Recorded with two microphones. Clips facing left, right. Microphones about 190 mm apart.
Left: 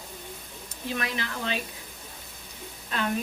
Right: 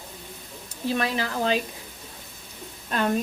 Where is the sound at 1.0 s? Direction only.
35° right (ahead or behind).